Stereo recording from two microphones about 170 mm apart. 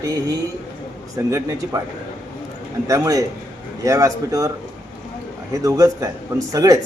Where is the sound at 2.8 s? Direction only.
20° right (ahead or behind).